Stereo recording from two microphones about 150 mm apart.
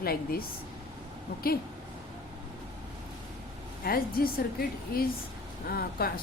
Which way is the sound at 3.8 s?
80° left.